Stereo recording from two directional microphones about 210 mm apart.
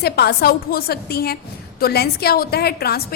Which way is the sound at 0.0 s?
50° left (ahead or behind).